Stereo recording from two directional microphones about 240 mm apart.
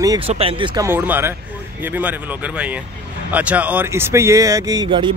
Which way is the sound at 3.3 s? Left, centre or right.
Centre.